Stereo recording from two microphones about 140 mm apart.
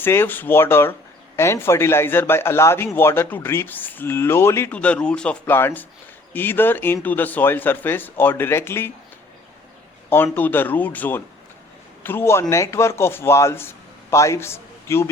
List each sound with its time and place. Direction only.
0.0 s a man's voice: 15° left (ahead or behind)
10.3 s a man's voice: 15° left (ahead or behind)